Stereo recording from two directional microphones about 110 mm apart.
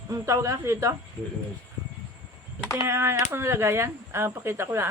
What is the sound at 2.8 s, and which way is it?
Speech, 25° right (ahead or behind).